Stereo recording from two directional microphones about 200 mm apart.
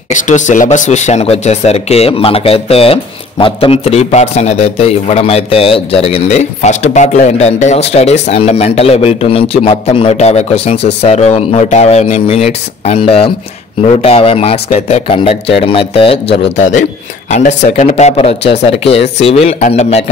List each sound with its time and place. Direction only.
0.1 s speech: 40° left (ahead or behind)